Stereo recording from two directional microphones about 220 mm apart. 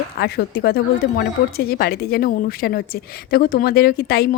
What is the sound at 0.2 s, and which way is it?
Speech, 45° left (ahead or behind).